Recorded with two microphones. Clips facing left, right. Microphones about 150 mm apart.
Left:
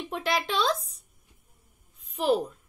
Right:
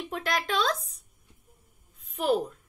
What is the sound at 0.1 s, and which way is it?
Speech, centre (ahead or behind).